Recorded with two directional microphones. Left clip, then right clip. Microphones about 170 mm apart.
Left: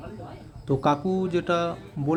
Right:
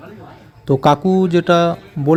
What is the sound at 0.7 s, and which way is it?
Speech, 40° right (ahead or behind).